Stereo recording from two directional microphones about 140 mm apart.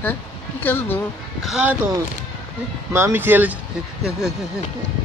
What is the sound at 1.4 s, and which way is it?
Speech, 5° right (ahead or behind).